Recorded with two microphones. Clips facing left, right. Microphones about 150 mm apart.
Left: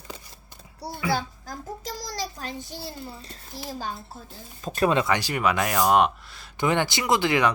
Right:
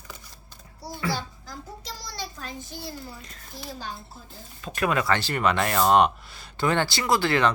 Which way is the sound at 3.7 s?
45° left (ahead or behind).